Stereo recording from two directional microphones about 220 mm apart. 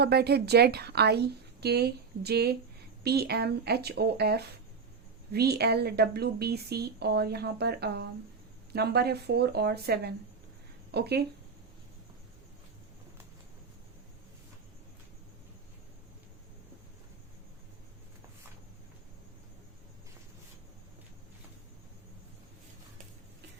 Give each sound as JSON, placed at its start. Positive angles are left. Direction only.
{"t": 0.0, "sound": "speech", "side_deg": -45}